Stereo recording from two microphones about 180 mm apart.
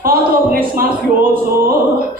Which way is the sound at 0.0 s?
55° right (ahead or behind).